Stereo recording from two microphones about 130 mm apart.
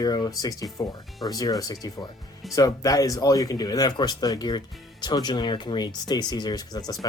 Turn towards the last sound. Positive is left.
turn(degrees=30)  # may be behind; listen again after turning